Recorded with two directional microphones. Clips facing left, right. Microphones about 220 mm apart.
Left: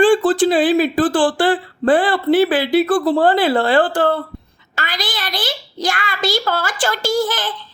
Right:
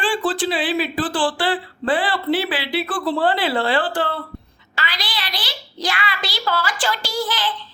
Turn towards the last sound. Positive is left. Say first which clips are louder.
# left 6 dB
turn(degrees=50)  # may be behind; listen again after turning